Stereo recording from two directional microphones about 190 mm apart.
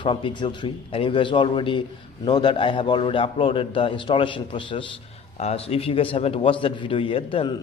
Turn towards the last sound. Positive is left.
turn(degrees=25)  # may be behind; listen again after turning